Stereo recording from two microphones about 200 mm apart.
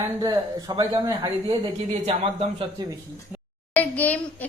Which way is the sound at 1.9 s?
30° right (ahead or behind).